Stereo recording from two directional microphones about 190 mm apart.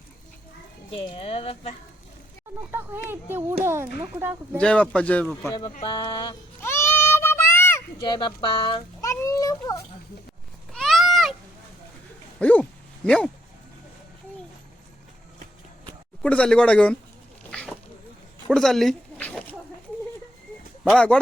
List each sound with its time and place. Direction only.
0.9 s speech: 30° left (ahead or behind)
2.7 s speech: 10° right (ahead or behind)
4.5 s speech: 5° left (ahead or behind)
5.5 s speech: 20° left (ahead or behind)
6.6 s a sound: 10° left (ahead or behind)
8.0 s a sound: 25° left (ahead or behind)
10.7 s a sound: centre (ahead or behind)
12.4 s dog: 5° left (ahead or behind)
13.1 s speech: 5° left (ahead or behind)
16.2 s speech: 5° left (ahead or behind)
17.5 s dog: 5° left (ahead or behind)
18.4 s a sound: 5° left (ahead or behind)
20.8 s speech: 5° left (ahead or behind)